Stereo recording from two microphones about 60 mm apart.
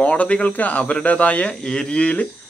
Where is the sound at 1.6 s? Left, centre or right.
Centre.